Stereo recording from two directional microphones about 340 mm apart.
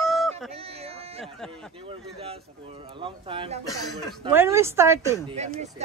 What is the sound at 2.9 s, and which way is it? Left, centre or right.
Speech, centre.